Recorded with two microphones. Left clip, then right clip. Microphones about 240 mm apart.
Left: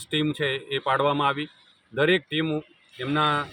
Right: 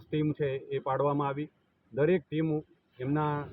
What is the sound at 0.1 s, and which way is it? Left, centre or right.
Speech, centre.